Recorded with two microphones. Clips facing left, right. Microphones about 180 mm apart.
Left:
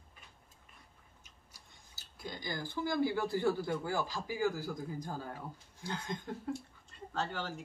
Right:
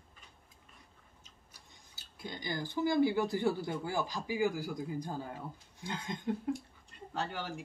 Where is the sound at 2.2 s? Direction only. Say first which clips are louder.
Right 2 dB; 20° right (ahead or behind).